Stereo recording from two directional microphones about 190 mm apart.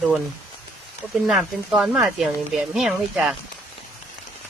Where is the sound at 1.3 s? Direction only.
Centre (ahead or behind).